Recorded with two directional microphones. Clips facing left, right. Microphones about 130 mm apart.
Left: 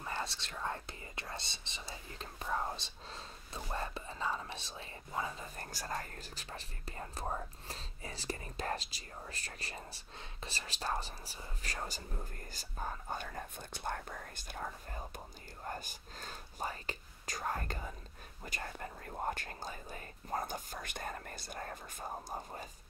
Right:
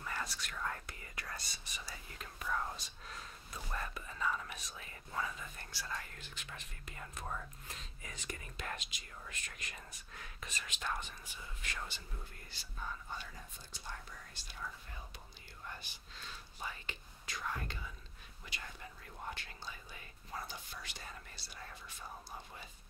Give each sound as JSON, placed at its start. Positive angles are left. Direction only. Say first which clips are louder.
{"t": 0.0, "sound": "speech", "louder": "left 2 dB", "side_deg": 30}